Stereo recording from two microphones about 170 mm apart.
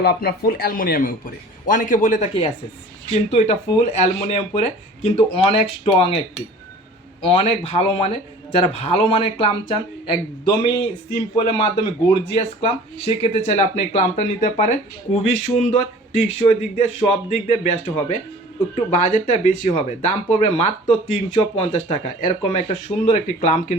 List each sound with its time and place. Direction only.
0.0 s a man's voice: 65° left (ahead or behind); by 2.5 s 35° left (ahead or behind)
3.9 s speech: 40° left (ahead or behind)